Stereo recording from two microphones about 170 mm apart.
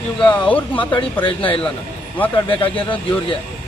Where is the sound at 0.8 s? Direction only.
30° left (ahead or behind).